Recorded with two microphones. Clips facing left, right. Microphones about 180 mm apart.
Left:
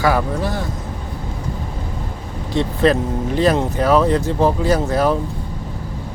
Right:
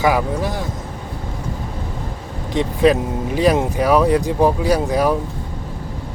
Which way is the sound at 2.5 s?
15° right (ahead or behind).